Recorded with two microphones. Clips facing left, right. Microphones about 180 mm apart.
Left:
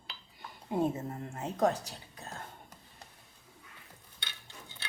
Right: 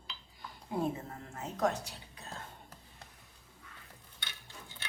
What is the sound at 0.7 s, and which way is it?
A woman's voice, 25° left (ahead or behind).